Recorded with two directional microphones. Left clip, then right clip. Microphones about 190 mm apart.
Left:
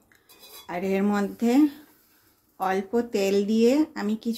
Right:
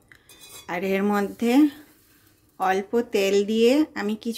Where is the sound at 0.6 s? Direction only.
15° right (ahead or behind).